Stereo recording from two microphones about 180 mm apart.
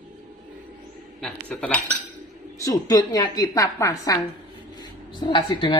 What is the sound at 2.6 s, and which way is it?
A woman's voice, 20° left (ahead or behind).